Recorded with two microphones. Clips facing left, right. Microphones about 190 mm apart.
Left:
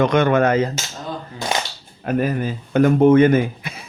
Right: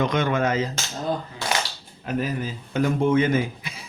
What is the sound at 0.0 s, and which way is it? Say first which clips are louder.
Speech: left 7 dB; 60° left (ahead or behind).